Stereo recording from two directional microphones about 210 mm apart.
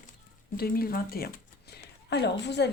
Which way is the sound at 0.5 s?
45° left (ahead or behind).